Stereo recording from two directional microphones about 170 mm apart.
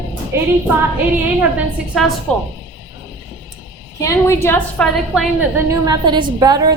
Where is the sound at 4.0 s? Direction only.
15° left (ahead or behind).